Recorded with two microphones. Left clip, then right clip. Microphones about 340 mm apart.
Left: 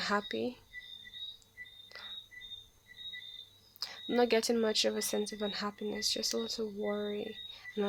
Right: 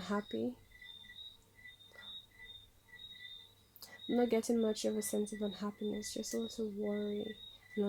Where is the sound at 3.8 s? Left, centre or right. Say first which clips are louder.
Left 4 dB; left.